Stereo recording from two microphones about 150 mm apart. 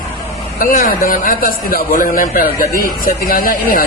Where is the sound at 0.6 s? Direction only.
65° left (ahead or behind).